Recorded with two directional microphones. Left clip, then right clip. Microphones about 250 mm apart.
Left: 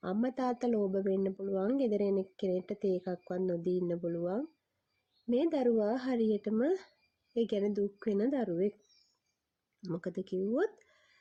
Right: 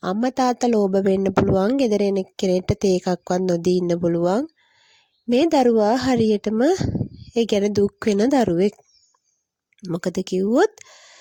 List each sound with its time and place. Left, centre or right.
0.0 s speech: right
9.8 s speech: right